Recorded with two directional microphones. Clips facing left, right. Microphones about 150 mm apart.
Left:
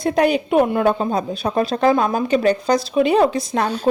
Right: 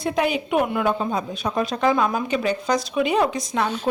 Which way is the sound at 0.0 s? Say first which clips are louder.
Left 5 dB; 40° left (ahead or behind).